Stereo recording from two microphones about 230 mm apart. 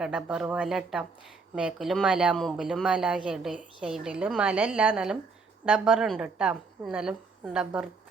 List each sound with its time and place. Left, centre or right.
0.0 s speech: centre